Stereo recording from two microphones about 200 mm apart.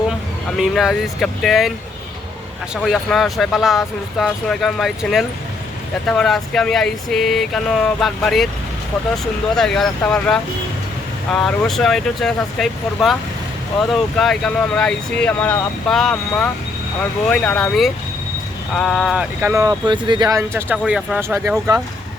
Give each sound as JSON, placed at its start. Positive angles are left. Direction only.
{"t": 0.5, "sound": "speech", "side_deg": 0}
{"t": 2.8, "sound": "speech", "side_deg": 0}
{"t": 14.2, "sound": "speech", "side_deg": 0}